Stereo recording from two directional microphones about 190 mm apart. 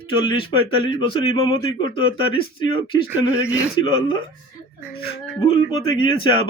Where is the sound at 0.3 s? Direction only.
25° left (ahead or behind).